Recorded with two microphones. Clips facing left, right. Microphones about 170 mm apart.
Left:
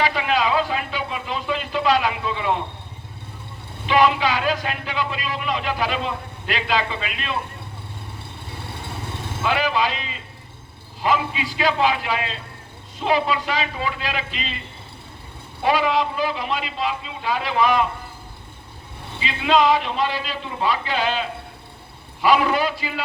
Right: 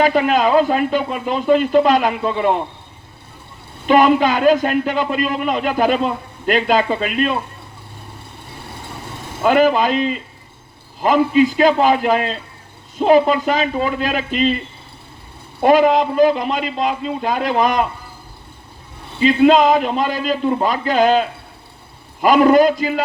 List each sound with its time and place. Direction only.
0.0 s a man's voice: 45° right (ahead or behind)
3.8 s a man's voice: 45° right (ahead or behind)
9.4 s a man's voice: 45° right (ahead or behind)
15.6 s a man's voice: 45° right (ahead or behind)
19.2 s a man's voice: 45° right (ahead or behind)